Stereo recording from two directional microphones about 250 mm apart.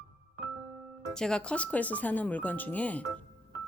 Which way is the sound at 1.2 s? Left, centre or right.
Centre.